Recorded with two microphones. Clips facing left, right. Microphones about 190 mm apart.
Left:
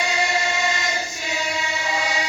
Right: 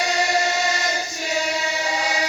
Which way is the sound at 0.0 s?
40° right (ahead or behind).